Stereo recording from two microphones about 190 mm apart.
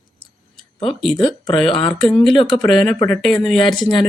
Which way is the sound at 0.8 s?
30° left (ahead or behind).